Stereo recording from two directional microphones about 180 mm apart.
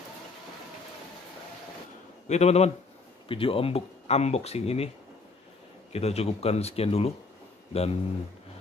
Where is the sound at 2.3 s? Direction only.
35° left (ahead or behind).